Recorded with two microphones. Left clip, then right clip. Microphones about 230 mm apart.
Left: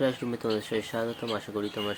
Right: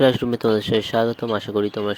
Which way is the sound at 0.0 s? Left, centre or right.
Right.